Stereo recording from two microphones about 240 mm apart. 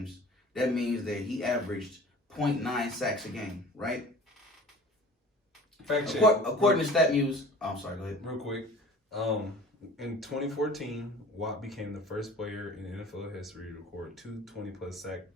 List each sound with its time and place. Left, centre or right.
0.5 s speech: centre
5.8 s speech: centre